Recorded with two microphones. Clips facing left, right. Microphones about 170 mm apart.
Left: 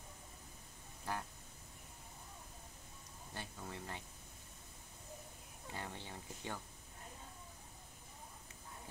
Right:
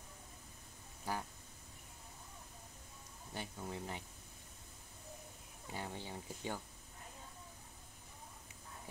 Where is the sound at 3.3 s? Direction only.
10° right (ahead or behind).